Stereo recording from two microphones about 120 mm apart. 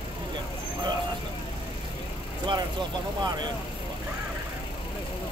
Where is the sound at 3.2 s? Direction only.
35° right (ahead or behind).